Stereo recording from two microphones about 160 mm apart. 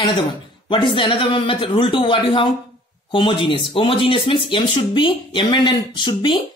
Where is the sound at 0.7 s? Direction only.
30° left (ahead or behind).